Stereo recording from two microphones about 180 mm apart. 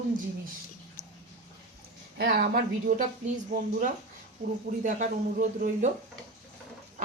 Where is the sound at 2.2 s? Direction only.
55° right (ahead or behind).